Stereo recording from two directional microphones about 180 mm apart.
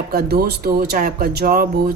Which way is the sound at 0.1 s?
60° right (ahead or behind).